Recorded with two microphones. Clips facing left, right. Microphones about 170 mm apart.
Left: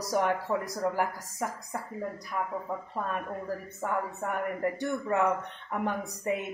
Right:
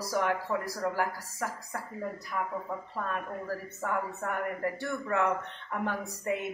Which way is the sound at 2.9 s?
20° left (ahead or behind).